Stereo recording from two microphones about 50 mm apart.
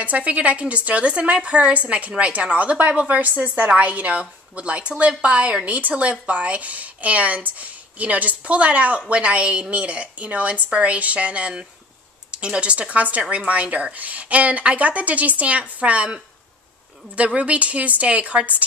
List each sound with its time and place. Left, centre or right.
0.0 s a woman's voice: right